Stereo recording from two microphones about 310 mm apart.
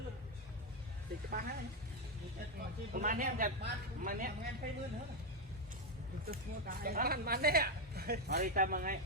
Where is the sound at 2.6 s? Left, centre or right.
Right.